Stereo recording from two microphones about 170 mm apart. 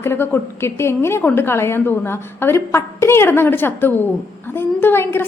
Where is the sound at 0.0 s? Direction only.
15° left (ahead or behind).